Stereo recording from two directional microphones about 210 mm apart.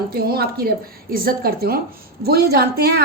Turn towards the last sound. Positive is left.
turn(degrees=-50)  # may be behind; listen again after turning